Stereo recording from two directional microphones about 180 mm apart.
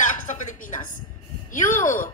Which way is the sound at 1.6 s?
50° left (ahead or behind).